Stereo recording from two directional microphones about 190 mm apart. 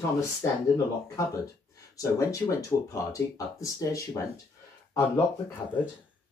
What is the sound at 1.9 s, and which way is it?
Speech, 15° left (ahead or behind).